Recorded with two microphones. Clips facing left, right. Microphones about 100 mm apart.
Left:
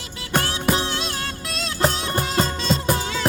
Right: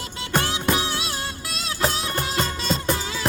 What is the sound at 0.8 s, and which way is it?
Music, 5° right (ahead or behind).